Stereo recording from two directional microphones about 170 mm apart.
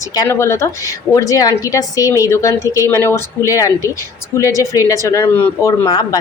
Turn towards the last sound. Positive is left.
turn(degrees=25)  # may be behind; listen again after turning